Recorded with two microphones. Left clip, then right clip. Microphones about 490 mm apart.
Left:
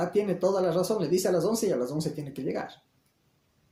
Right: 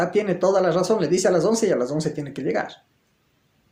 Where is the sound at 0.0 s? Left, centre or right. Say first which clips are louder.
Right 6 dB; right.